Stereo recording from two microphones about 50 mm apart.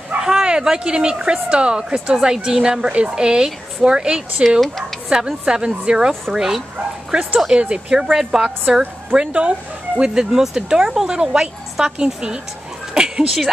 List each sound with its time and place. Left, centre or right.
0.2 s speech: centre
8.0 s speech: centre